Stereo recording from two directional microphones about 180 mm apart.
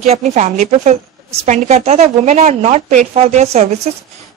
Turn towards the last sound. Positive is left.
turn(degrees=-35)  # may be behind; listen again after turning